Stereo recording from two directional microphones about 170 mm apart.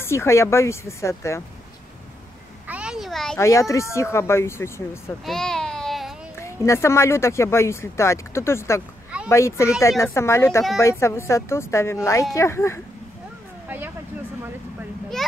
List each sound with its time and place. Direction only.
0.0 s speech: 15° left (ahead or behind)
2.7 s a sound: 5° right (ahead or behind)
3.3 s speech: 15° left (ahead or behind)
5.2 s a sound: 5° left (ahead or behind)
6.4 s speech: 15° left (ahead or behind)
13.7 s vehicle: 10° right (ahead or behind)